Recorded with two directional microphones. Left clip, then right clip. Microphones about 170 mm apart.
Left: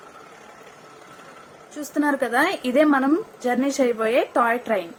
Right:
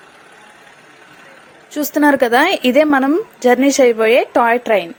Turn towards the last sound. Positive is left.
turn(degrees=-50)  # may be behind; listen again after turning